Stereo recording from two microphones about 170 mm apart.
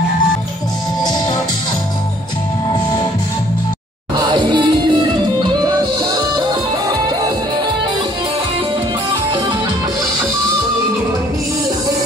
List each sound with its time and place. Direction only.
4.2 s music: 25° right (ahead or behind)